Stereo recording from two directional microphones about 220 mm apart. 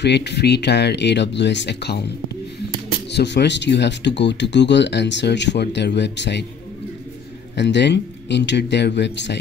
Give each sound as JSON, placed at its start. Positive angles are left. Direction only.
{"t": 0.0, "sound": "speech", "side_deg": 50}
{"t": 3.1, "sound": "speech", "side_deg": 50}
{"t": 7.5, "sound": "speech", "side_deg": 50}